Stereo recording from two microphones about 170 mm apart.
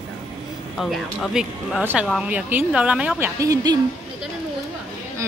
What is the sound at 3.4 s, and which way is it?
Speech, 20° right (ahead or behind).